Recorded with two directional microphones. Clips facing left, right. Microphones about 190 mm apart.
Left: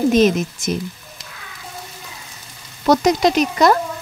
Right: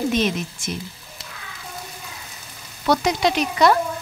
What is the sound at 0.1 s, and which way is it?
Speech, 40° left (ahead or behind).